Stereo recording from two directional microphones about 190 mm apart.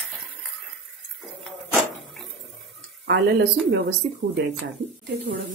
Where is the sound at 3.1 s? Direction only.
55° right (ahead or behind).